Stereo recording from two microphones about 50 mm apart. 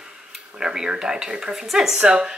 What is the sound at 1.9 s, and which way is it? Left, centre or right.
Speech, right.